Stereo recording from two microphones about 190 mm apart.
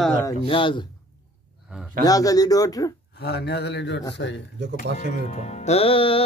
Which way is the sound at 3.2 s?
60° left (ahead or behind).